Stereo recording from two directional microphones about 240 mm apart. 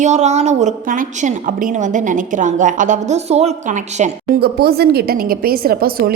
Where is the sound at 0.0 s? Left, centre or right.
Right.